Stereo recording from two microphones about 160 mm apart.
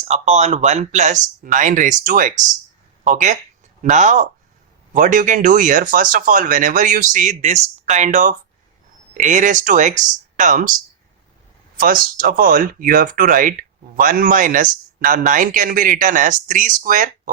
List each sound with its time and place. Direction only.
0.0 s speech: 45° right (ahead or behind)
11.8 s speech: 60° right (ahead or behind)